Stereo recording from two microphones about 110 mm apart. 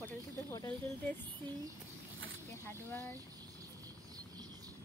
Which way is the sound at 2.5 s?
25° left (ahead or behind).